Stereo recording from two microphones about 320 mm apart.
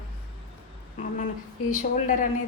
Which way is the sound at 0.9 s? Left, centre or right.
Left.